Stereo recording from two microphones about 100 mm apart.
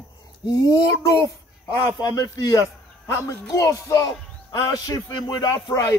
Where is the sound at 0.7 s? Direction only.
35° left (ahead or behind).